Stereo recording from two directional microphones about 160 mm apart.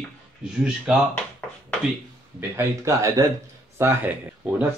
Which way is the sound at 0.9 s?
5° right (ahead or behind).